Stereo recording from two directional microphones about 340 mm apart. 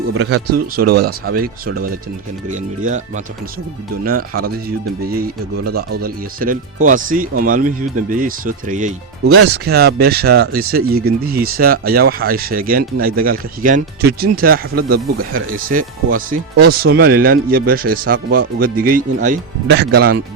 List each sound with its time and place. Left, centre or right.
0.1 s speech: right
0.8 s speech: right
4.0 s speech: right
9.3 s speech: right